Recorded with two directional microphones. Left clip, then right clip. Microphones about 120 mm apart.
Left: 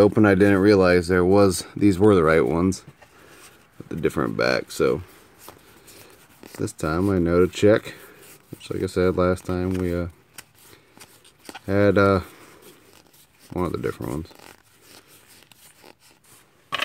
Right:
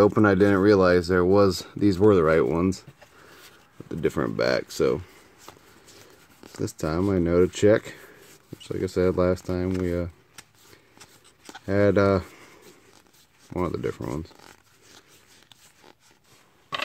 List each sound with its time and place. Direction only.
0.0 s speech: 10° left (ahead or behind)
3.9 s speech: 5° left (ahead or behind)
11.0 s a sound: 5° left (ahead or behind)
13.5 s zipper: 5° left (ahead or behind)